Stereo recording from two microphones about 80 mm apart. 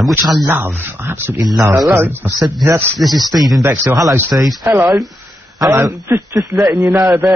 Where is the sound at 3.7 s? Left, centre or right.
Right.